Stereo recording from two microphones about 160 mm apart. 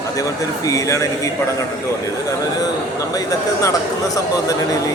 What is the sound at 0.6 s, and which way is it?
Speech, 20° left (ahead or behind).